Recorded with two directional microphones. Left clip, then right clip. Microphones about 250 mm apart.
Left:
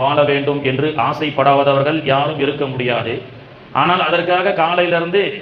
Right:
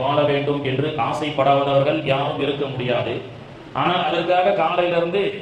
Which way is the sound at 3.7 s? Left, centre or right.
Left.